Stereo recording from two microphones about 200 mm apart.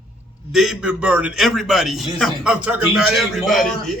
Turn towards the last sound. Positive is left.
turn(degrees=0)  # may be behind; listen again after turning